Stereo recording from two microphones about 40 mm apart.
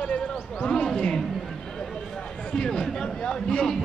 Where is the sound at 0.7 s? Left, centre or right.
Centre.